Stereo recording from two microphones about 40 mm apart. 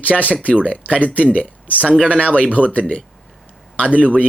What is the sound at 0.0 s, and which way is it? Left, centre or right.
Speech, left.